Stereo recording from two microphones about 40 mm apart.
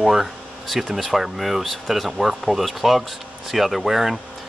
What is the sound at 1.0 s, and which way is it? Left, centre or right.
Speech, centre.